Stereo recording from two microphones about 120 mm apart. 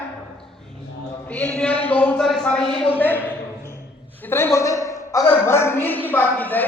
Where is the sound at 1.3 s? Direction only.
10° left (ahead or behind).